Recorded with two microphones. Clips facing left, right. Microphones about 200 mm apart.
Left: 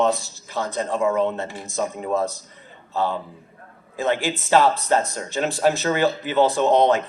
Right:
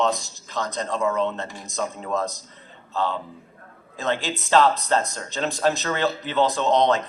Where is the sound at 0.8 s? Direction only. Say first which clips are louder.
Left 3 dB; 15° left (ahead or behind).